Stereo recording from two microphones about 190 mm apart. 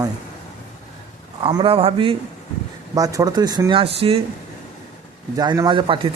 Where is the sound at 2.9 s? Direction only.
20° right (ahead or behind).